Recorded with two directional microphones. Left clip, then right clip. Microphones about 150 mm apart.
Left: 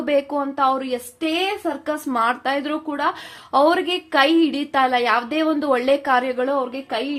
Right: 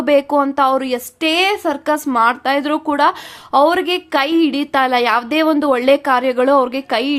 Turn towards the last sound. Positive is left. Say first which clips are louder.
# right 7 dB
turn(degrees=-40)  # may be behind; listen again after turning